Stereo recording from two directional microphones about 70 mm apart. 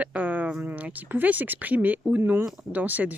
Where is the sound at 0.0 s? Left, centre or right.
Right.